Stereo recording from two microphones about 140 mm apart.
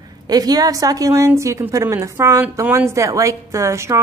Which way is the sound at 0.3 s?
25° right (ahead or behind).